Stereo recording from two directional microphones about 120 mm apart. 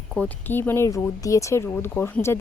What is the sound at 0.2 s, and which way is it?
Speech, 20° left (ahead or behind).